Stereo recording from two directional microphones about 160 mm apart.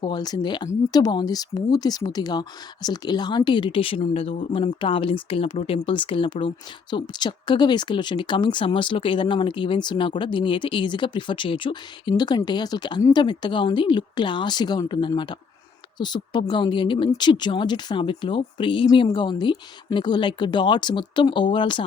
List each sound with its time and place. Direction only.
0.0 s speech: 25° left (ahead or behind)